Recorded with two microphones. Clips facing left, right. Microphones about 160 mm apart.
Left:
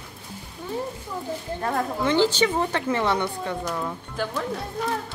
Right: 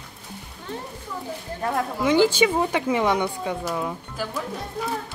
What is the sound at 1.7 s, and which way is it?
A woman's voice, 10° right (ahead or behind).